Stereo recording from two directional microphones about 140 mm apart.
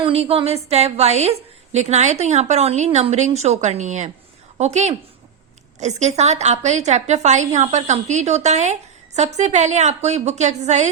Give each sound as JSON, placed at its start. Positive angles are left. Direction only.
{"t": 0.0, "sound": "a woman's voice", "side_deg": -45}